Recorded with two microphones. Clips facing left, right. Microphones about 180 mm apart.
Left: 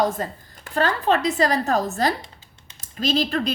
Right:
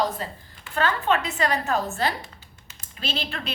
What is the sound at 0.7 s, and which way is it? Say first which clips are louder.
A woman's voice: left 3 dB; 35° left (ahead or behind).